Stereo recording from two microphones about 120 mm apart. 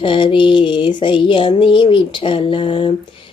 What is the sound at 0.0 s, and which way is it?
Speech, 45° left (ahead or behind).